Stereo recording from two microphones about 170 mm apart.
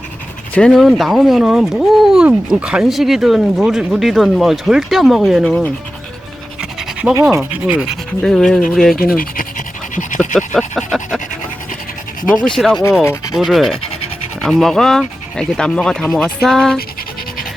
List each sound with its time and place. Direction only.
0.5 s speech: 5° left (ahead or behind)
7.1 s speech: 20° right (ahead or behind)
8.2 s speech: 5° left (ahead or behind)
9.0 s speech: 55° left (ahead or behind)
10.5 s speech: centre (ahead or behind)
12.5 s speech: centre (ahead or behind)
13.0 s rub: 15° left (ahead or behind)
13.3 s speech: centre (ahead or behind)